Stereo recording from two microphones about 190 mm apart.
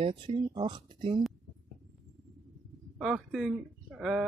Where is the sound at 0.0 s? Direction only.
25° right (ahead or behind).